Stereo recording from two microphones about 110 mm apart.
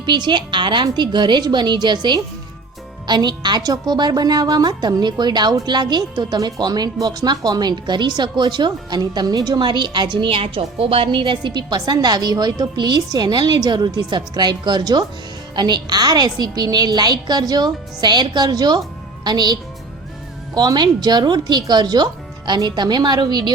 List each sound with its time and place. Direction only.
0.0 s a woman's voice: 45° right (ahead or behind)
20.6 s a woman's voice: 40° right (ahead or behind)